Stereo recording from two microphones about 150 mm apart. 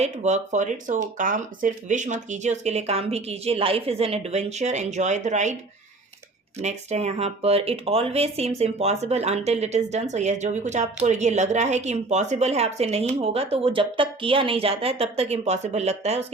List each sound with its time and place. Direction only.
0.0 s a woman's voice: 50° right (ahead or behind)
6.6 s a woman's voice: 45° right (ahead or behind)